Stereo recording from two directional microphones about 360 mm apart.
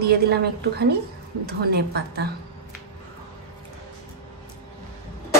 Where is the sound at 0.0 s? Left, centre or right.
Right.